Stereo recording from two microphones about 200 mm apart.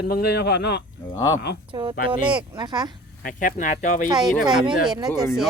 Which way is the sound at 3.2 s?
40° left (ahead or behind).